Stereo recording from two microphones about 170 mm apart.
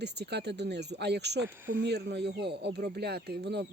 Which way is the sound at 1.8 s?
90° right.